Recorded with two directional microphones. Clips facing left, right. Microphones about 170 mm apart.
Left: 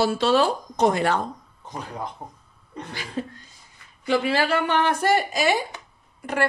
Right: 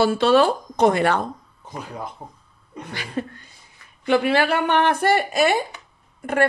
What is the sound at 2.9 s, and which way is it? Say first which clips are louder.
A woman's voice: right 3 dB; 65° right (ahead or behind).